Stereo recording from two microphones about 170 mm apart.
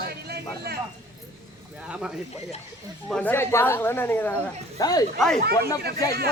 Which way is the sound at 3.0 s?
5° left (ahead or behind).